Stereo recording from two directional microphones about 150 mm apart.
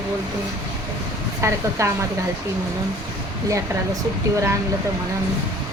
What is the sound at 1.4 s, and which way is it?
Speech, 20° right (ahead or behind).